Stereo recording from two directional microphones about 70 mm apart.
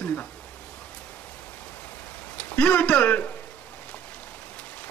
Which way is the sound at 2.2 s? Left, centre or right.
Left.